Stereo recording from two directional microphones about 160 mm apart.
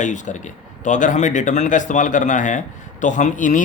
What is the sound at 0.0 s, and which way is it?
Speech, 50° left (ahead or behind).